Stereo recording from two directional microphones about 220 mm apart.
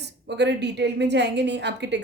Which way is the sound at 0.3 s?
50° right (ahead or behind).